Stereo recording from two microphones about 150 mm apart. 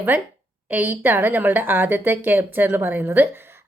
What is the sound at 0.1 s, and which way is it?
Speech, 15° right (ahead or behind).